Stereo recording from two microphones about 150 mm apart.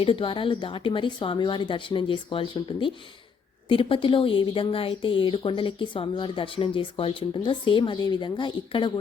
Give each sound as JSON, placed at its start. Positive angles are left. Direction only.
{"t": 0.0, "sound": "speech", "side_deg": 35}